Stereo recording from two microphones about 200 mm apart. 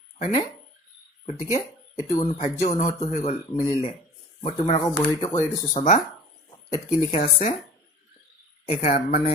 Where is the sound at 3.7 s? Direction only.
25° left (ahead or behind).